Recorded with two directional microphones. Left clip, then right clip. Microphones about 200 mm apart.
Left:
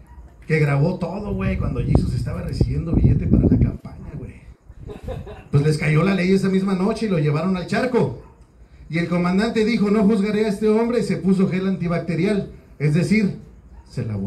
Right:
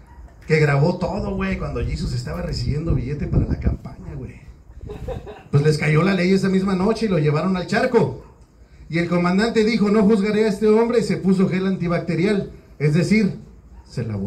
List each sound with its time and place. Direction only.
0.5 s a man's voice: 25° right (ahead or behind)
3.8 s a sound: 20° right (ahead or behind)
5.5 s a man's voice: 25° right (ahead or behind)